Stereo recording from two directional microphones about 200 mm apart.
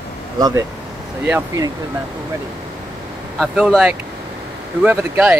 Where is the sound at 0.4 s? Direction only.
20° right (ahead or behind).